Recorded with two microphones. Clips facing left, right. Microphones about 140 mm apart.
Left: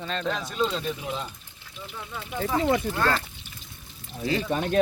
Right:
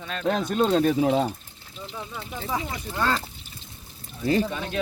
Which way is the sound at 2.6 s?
60° left (ahead or behind).